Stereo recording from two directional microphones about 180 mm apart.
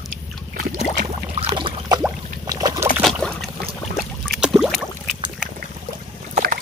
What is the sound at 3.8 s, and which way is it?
Boat, 35° left (ahead or behind).